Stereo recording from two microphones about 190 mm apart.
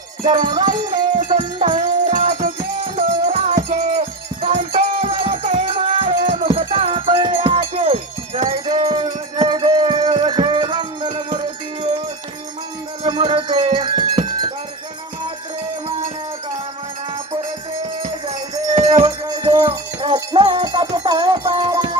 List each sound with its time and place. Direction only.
0.3 s music: 45° right (ahead or behind)
0.5 s music: 25° right (ahead or behind)
2.1 s music: 40° right (ahead or behind)
9.5 s wind chime: 25° right (ahead or behind)
10.2 s music: 25° right (ahead or behind)
13.0 s wind chime: 25° right (ahead or behind)
18.0 s music: 25° right (ahead or behind)
19.5 s wind chime: 30° right (ahead or behind)
20.1 s wind chime: 20° right (ahead or behind)
20.9 s music: 25° right (ahead or behind)